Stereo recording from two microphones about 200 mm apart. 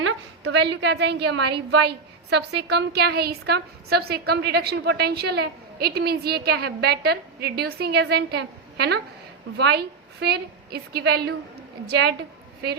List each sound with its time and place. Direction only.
0.0 s a woman's voice: 65° right (ahead or behind)